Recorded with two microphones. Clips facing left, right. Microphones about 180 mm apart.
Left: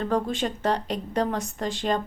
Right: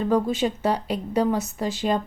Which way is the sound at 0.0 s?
10° right (ahead or behind).